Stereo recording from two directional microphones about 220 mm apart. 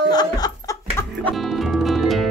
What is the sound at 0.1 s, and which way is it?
Laughter, 15° left (ahead or behind).